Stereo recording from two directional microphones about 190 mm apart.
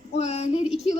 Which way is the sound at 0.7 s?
5° right (ahead or behind).